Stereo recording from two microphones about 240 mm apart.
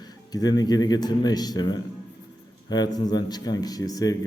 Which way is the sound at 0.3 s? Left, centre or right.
Centre.